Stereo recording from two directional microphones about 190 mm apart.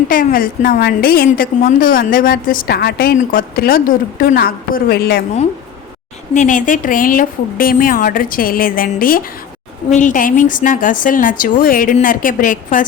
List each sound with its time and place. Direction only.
0.1 s a woman's voice: 45° left (ahead or behind)
6.3 s a woman's voice: 40° left (ahead or behind)